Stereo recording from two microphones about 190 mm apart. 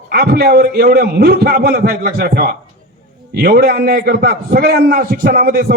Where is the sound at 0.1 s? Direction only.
55° right (ahead or behind).